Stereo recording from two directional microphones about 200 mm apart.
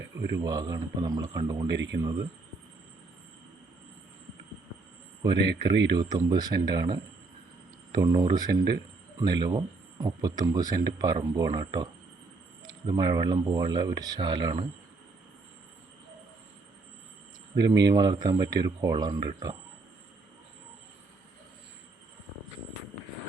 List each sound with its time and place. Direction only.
0.3 s speech: 20° right (ahead or behind)
1.6 s speech: 60° right (ahead or behind)
2.0 s speech: 20° right (ahead or behind)
5.4 s speech: 60° right (ahead or behind)
5.9 s speech: 20° right (ahead or behind)
17.6 s speech: 20° right (ahead or behind)